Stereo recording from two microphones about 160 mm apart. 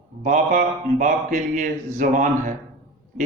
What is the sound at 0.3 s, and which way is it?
A man's voice, 55° right (ahead or behind).